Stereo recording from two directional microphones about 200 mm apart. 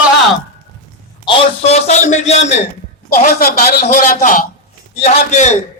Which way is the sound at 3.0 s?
50° left (ahead or behind).